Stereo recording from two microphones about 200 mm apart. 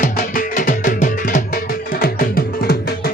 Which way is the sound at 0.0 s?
40° left (ahead or behind).